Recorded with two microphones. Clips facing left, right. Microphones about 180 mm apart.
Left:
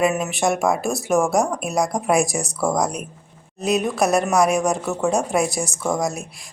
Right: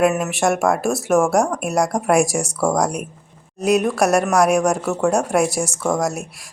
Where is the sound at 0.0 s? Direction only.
5° right (ahead or behind).